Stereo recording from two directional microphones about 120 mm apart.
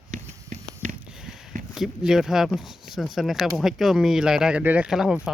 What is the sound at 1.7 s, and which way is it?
Speech, 5° right (ahead or behind).